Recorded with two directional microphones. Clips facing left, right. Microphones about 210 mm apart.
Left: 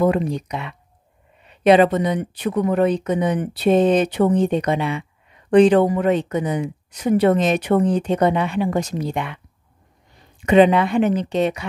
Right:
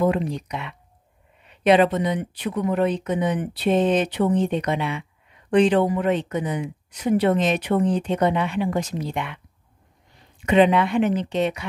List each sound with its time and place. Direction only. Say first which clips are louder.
0.0 s speech: left 3 dB; 40° left (ahead or behind)
2.0 s speech: left 3 dB; 40° left (ahead or behind)
10.5 s speech: left 3 dB; 40° left (ahead or behind)